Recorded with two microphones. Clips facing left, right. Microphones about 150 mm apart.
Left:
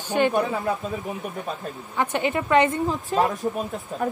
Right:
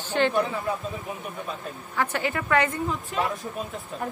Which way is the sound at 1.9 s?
20° left (ahead or behind).